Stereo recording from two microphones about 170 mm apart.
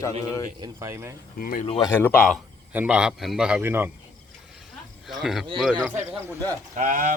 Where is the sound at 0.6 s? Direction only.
15° right (ahead or behind).